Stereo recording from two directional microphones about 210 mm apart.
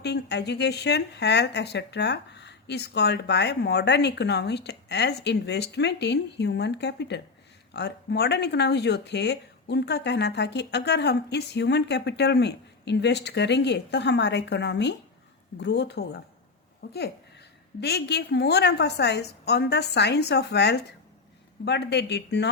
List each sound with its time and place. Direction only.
0.0 s speech: 50° left (ahead or behind)